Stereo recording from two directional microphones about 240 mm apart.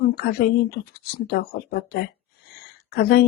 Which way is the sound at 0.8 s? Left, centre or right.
Left.